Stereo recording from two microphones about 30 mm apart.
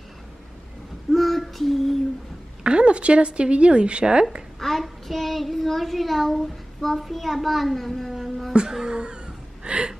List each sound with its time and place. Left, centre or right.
1.1 s child singing: centre
2.6 s speech: right
4.0 s a sound: right
4.6 s child singing: centre
8.8 s a sound: right
9.7 s gasp: right